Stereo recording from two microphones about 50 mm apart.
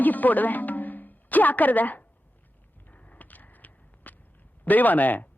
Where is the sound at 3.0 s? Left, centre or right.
Left.